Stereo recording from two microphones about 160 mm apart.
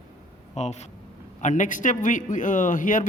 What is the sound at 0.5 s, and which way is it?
A man's voice, 45° left (ahead or behind).